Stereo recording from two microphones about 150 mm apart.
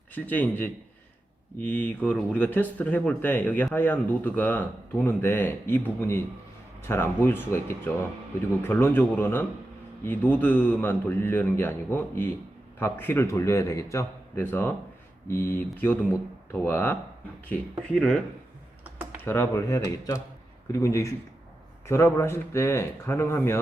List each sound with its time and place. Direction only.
0.1 s speech: 10° left (ahead or behind)
19.2 s speech: 15° left (ahead or behind)